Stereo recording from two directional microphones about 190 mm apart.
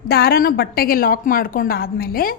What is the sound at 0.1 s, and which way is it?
A woman's voice, 55° left (ahead or behind).